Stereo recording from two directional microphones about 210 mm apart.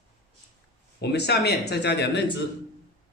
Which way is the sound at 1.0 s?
50° left (ahead or behind).